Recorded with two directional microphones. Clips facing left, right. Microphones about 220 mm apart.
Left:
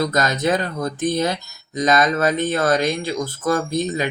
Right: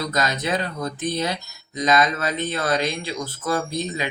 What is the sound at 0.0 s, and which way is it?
Speech, 45° left (ahead or behind).